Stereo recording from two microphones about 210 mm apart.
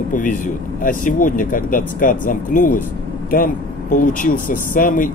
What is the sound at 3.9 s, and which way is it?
Speech, 40° left (ahead or behind).